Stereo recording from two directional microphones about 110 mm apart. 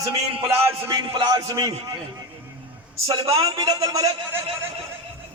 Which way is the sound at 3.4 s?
40° right (ahead or behind).